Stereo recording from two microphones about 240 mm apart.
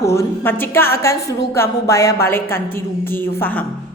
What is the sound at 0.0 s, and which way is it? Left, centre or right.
A woman's voice, centre.